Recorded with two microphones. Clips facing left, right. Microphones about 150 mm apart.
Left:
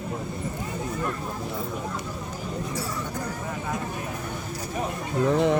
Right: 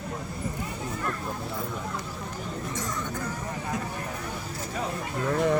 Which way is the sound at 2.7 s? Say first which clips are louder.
Left 2 dB; 10° left (ahead or behind).